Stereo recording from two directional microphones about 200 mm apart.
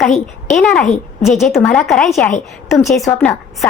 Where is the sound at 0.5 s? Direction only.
Centre (ahead or behind).